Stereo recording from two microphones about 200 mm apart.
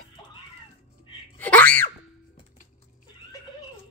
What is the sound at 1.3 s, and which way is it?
Screaming, 10° left (ahead or behind).